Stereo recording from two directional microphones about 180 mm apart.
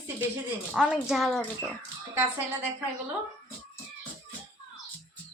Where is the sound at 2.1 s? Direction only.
10° right (ahead or behind).